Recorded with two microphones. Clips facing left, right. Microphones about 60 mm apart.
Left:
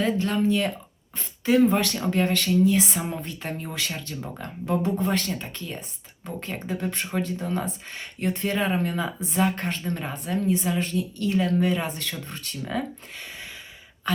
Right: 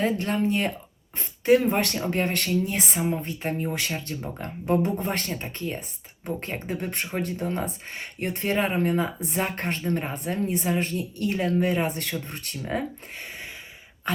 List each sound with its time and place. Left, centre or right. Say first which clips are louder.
0.0 s speech: left 1 dB; right
3.0 s speech: right 4 dB; right